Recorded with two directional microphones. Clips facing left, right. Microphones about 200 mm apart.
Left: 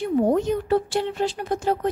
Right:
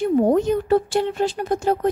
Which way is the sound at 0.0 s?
45° right (ahead or behind).